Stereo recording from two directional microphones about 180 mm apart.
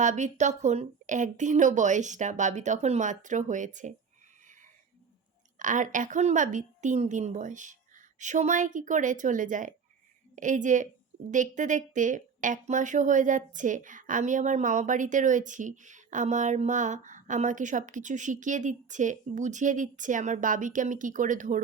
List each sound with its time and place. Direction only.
0.0 s a woman's voice: 40° right (ahead or behind)
5.5 s a woman's voice: 45° right (ahead or behind)